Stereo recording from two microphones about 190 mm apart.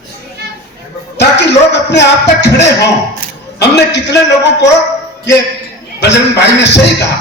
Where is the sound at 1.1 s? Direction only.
65° left (ahead or behind).